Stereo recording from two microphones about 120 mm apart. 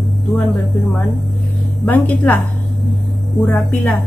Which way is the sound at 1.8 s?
15° left (ahead or behind).